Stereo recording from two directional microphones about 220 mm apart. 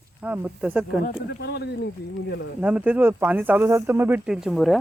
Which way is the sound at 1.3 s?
50° left (ahead or behind).